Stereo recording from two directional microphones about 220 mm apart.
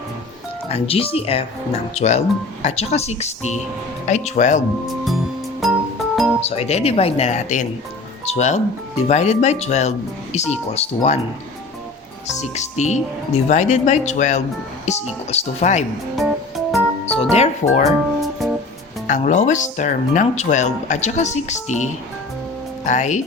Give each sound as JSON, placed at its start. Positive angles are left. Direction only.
{"t": 0.7, "sound": "speech", "side_deg": 25}
{"t": 5.0, "sound": "music", "side_deg": 0}
{"t": 6.4, "sound": "speech", "side_deg": 30}
{"t": 12.4, "sound": "speech", "side_deg": 30}
{"t": 16.1, "sound": "music", "side_deg": 0}
{"t": 17.3, "sound": "speech", "side_deg": 30}
{"t": 17.8, "sound": "speech", "side_deg": 0}
{"t": 19.0, "sound": "speech", "side_deg": 35}
{"t": 22.9, "sound": "speech", "side_deg": 35}